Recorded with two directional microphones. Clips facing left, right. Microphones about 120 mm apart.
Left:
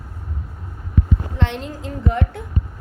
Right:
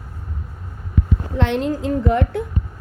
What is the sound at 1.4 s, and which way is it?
Speech, 65° right (ahead or behind).